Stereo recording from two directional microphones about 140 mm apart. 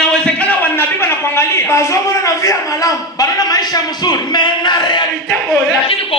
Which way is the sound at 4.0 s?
30° left (ahead or behind).